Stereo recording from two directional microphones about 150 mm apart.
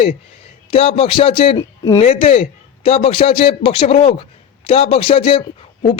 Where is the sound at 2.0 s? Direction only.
40° left (ahead or behind).